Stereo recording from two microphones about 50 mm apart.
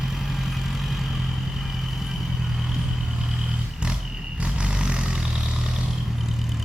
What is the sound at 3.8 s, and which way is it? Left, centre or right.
Vehicle, right.